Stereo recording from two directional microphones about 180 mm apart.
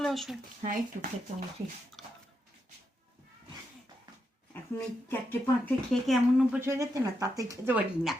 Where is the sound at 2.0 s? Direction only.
Centre (ahead or behind).